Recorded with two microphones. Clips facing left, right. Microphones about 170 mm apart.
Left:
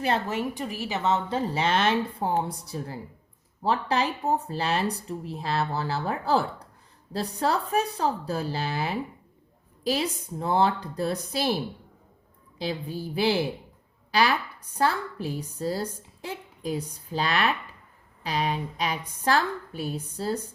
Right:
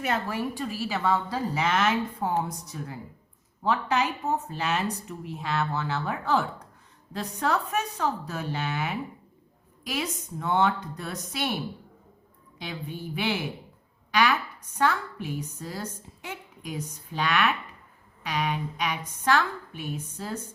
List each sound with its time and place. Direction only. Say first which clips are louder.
0.0 s a woman's voice: left 2 dB; 25° left (ahead or behind)